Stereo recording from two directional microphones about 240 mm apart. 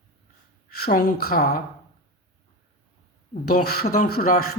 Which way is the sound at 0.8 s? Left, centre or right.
Left.